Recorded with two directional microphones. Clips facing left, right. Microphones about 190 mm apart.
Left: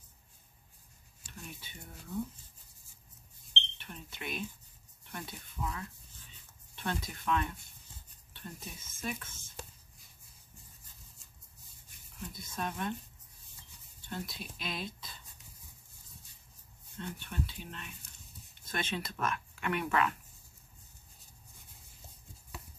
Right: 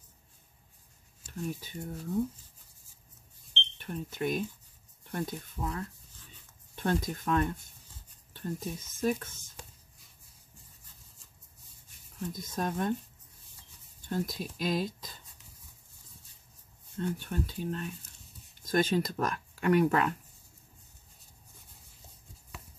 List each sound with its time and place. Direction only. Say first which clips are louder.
1.2 s speech: right 12 dB; 40° right (ahead or behind)
3.7 s speech: right 10 dB; 45° right (ahead or behind)
12.3 s speech: right 5 dB; 40° right (ahead or behind)
14.0 s speech: right 8 dB; 45° right (ahead or behind)
17.0 s speech: right 6 dB; 45° right (ahead or behind)